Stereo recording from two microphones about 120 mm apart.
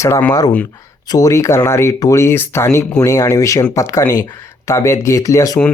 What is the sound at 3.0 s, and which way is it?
Speech, 30° left (ahead or behind).